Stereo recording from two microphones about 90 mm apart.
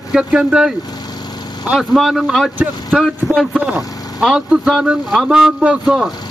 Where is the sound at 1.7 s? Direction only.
Centre (ahead or behind).